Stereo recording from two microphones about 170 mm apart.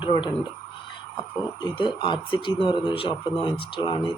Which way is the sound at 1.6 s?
25° left (ahead or behind).